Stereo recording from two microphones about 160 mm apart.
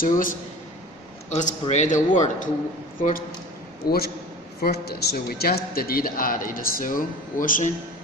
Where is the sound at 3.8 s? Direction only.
70° left (ahead or behind); by 7.7 s 55° left (ahead or behind).